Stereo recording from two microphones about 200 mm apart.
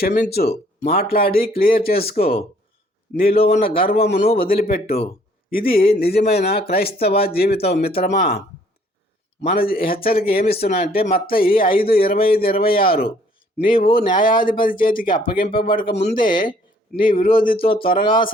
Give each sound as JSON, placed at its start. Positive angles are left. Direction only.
{"t": 0.0, "sound": "a man's voice", "side_deg": 50}
{"t": 9.6, "sound": "a man's voice", "side_deg": 45}